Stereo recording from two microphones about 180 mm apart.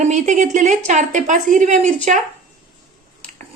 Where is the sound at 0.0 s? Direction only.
40° right (ahead or behind).